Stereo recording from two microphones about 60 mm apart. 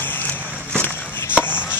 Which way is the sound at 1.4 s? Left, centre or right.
Left.